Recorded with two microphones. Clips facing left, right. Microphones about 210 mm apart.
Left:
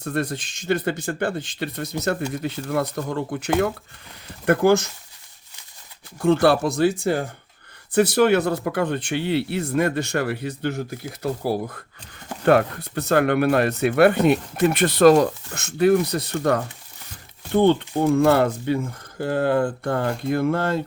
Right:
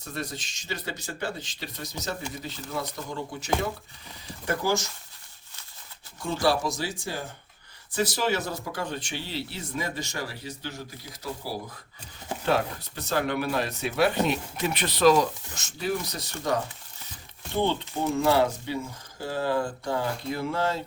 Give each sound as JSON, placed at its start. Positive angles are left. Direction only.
{"t": 0.0, "sound": "speech", "side_deg": 55}
{"t": 6.1, "sound": "speech", "side_deg": 60}